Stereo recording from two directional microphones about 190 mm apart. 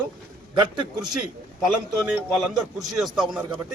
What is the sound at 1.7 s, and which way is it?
A man's voice, 5° right (ahead or behind).